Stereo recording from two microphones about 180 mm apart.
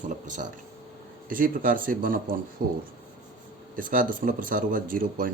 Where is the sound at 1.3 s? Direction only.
50° right (ahead or behind).